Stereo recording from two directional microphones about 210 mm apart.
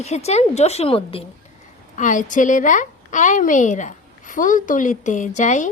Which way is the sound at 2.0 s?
35° left (ahead or behind).